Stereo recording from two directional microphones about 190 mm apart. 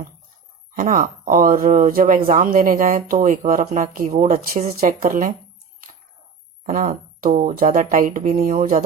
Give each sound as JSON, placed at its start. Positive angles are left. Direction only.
{"t": 0.8, "sound": "speech", "side_deg": -45}
{"t": 6.7, "sound": "speech", "side_deg": -45}